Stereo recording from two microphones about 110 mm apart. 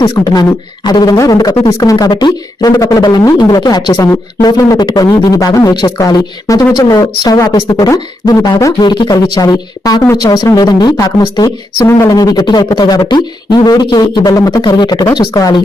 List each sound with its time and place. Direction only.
0.0 s a man's voice: 40° left (ahead or behind)
11.8 s a man's voice: 25° left (ahead or behind)